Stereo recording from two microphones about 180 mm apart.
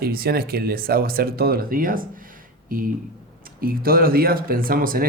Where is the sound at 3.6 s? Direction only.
55° right (ahead or behind).